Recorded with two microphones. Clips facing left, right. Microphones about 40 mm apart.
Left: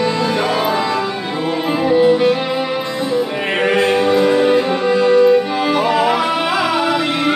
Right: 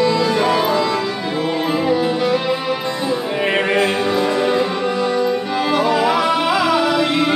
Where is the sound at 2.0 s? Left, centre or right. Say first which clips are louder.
Left 6 dB; left.